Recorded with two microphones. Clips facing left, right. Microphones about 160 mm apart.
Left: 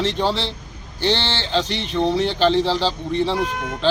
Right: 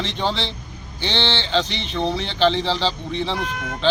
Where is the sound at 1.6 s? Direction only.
45° left (ahead or behind).